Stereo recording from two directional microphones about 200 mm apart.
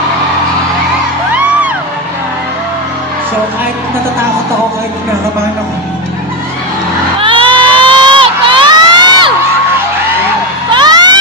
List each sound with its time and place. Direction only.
7.2 s crowd: 25° right (ahead or behind)
10.7 s music: 20° right (ahead or behind)